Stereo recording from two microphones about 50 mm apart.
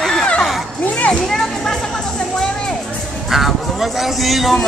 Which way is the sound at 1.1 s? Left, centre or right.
Centre.